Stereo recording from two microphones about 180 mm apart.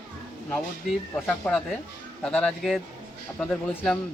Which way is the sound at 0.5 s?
5° left (ahead or behind).